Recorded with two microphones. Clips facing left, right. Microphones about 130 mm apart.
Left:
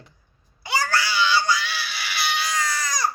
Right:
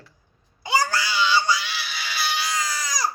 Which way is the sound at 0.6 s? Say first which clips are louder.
Right 1 dB; 15° right (ahead or behind).